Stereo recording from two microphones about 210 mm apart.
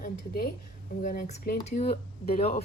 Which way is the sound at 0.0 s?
45° left (ahead or behind).